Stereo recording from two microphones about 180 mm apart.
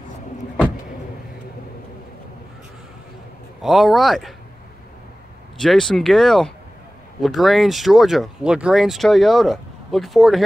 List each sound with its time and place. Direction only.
3.6 s speech: centre (ahead or behind)
5.6 s speech: centre (ahead or behind)